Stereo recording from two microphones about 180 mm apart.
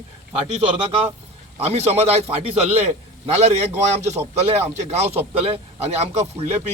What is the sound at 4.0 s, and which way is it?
Speech, 40° right (ahead or behind).